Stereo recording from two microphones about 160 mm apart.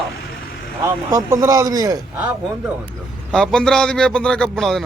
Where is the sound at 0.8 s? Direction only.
20° right (ahead or behind).